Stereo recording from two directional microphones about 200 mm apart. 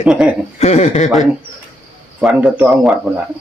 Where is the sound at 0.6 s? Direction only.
35° left (ahead or behind).